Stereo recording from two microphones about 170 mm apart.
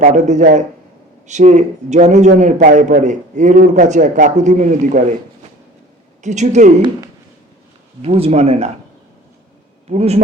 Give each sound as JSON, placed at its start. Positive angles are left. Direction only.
{"t": 0.0, "sound": "a man's voice", "side_deg": -45}
{"t": 6.2, "sound": "a man's voice", "side_deg": -45}
{"t": 8.0, "sound": "speech", "side_deg": -35}
{"t": 9.9, "sound": "speech", "side_deg": -40}